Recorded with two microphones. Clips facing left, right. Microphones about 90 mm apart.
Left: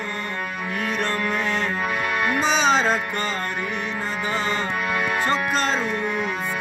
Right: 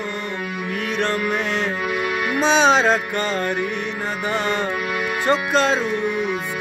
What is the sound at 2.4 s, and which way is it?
Music, 75° right (ahead or behind).